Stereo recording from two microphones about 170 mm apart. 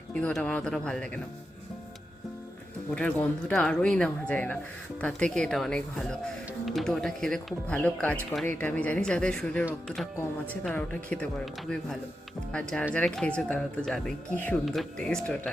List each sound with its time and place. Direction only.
0.1 s speech: 5° left (ahead or behind)
2.9 s speech: 5° left (ahead or behind)